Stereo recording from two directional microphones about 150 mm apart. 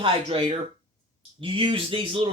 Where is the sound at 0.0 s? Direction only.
35° right (ahead or behind).